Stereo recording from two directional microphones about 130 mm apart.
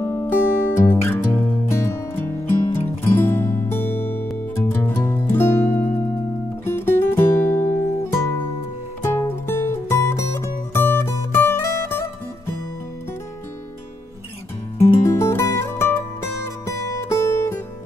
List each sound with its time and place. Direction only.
0.0 s music: 20° left (ahead or behind)
14.8 s music: 20° left (ahead or behind)